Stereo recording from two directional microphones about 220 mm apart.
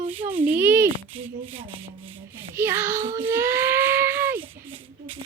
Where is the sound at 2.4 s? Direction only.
10° right (ahead or behind).